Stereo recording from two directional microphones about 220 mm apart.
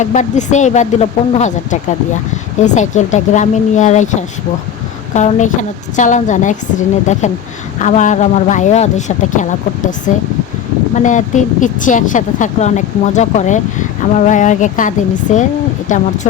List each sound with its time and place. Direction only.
0.0 s a woman's voice: 35° left (ahead or behind)